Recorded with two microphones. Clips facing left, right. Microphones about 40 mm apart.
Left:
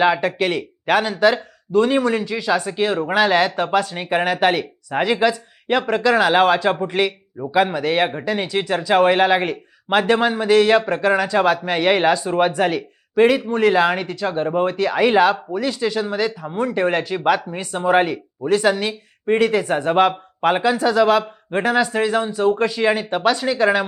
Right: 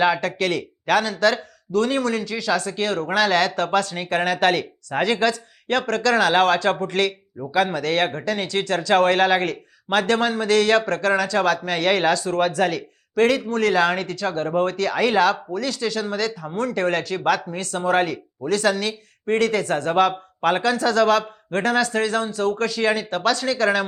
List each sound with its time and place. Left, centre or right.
0.0 s speech: centre